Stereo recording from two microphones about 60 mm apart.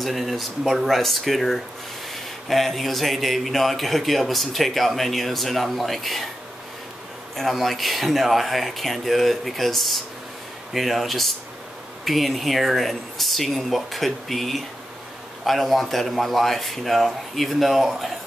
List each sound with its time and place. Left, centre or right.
0.0 s speech: centre
7.3 s speech: centre